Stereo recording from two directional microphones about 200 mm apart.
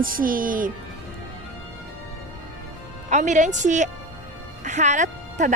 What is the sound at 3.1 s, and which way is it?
A woman's voice, 35° right (ahead or behind).